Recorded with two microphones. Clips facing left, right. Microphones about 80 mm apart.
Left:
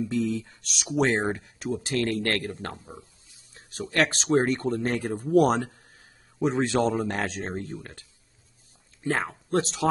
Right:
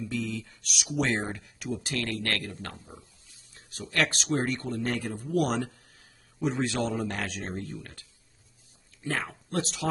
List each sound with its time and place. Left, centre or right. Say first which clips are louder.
0.0 s speech: left 6 dB; left
3.5 s speech: left 4 dB; left